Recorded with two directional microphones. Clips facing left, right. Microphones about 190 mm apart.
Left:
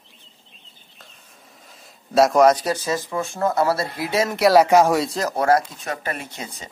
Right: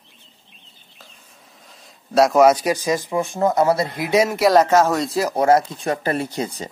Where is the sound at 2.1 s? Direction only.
Centre (ahead or behind).